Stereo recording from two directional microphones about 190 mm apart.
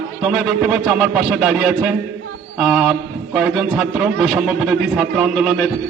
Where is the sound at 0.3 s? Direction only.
Centre (ahead or behind).